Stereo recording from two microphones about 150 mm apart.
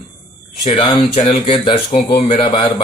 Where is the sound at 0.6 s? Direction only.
40° left (ahead or behind).